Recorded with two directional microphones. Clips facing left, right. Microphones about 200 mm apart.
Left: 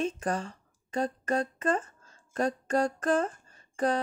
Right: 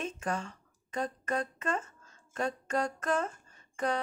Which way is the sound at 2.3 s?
35° left (ahead or behind).